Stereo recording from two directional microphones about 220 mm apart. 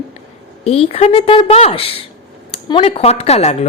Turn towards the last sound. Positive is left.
turn(degrees=30)  # may be behind; listen again after turning